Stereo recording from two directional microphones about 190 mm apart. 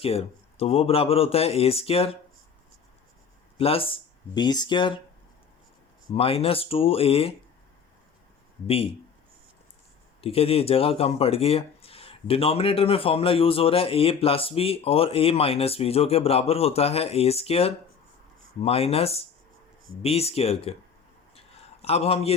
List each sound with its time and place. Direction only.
0.0 s speech: 30° left (ahead or behind)
3.6 s speech: 30° left (ahead or behind)
6.1 s speech: 30° left (ahead or behind)
8.6 s speech: 30° left (ahead or behind)
10.2 s speech: 30° left (ahead or behind)
21.3 s a sound: 30° left (ahead or behind)